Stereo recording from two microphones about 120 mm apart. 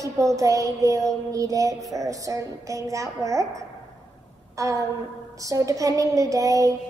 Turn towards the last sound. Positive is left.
turn(degrees=-30)  # may be behind; listen again after turning